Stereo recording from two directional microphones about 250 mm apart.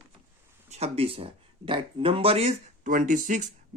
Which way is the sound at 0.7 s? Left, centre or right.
Right.